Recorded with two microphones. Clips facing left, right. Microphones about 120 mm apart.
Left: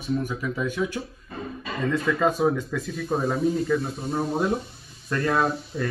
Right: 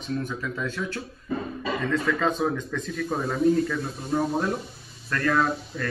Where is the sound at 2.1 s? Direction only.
10° left (ahead or behind).